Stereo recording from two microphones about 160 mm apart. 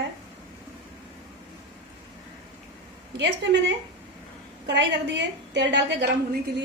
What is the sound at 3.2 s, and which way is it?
A woman's voice, 90° right.